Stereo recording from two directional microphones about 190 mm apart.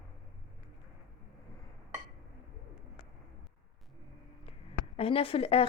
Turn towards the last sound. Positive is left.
turn(degrees=30)  # may be behind; listen again after turning